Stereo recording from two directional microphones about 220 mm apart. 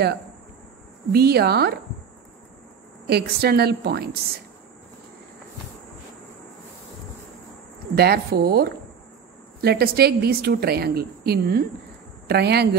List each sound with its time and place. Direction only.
1.1 s a woman's voice: 45° right (ahead or behind)
3.1 s a woman's voice: 45° right (ahead or behind)
7.9 s a woman's voice: 45° right (ahead or behind)